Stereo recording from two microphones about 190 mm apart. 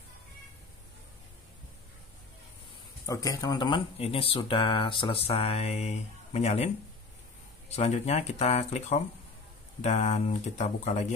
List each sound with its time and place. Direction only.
3.1 s speech: 20° left (ahead or behind); by 6.7 s 35° left (ahead or behind)
7.7 s speech: 35° left (ahead or behind)